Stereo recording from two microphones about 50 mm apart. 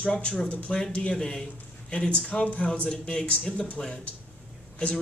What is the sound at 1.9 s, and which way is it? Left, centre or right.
A man's voice, left.